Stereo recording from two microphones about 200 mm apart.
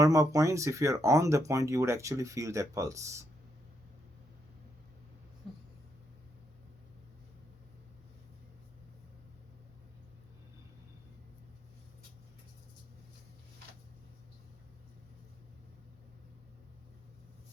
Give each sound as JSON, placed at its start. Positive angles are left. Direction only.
{"t": 0.0, "sound": "speech", "side_deg": -15}